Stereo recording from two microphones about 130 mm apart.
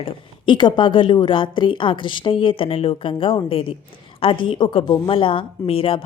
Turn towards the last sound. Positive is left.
turn(degrees=45)  # may be behind; listen again after turning